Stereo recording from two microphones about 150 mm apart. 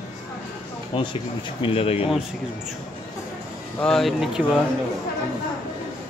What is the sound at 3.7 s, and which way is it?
Speech, 5° left (ahead or behind).